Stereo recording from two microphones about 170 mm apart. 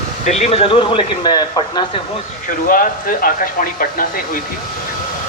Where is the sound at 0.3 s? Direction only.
40° left (ahead or behind); by 1.8 s 25° left (ahead or behind).